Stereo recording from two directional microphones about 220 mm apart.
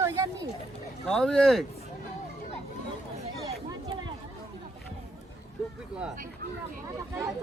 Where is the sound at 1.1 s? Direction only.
5° left (ahead or behind).